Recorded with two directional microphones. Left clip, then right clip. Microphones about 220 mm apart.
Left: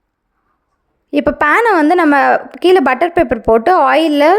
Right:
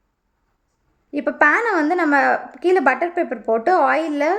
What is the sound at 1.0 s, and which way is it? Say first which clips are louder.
A woman's voice: left 4 dB; 45° left (ahead or behind).